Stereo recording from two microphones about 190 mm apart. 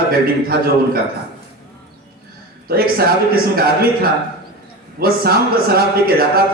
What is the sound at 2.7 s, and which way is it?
A man's voice, 55° right (ahead or behind).